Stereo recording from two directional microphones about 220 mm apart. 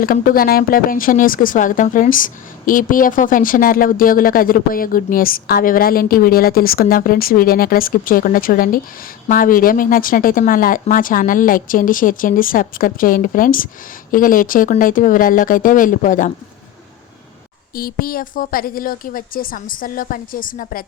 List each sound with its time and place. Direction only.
0.0 s speech: 40° left (ahead or behind)
17.7 s speech: 40° left (ahead or behind)